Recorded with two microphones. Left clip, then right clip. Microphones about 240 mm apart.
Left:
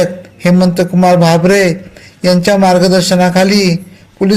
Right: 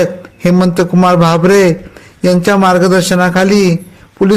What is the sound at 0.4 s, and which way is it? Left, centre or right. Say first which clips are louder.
A man's voice: even; right.